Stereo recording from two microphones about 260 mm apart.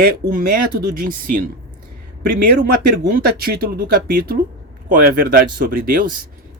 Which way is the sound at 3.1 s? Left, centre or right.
Right.